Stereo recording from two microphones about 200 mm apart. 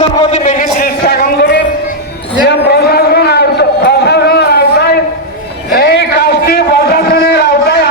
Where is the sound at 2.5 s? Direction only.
55° left (ahead or behind).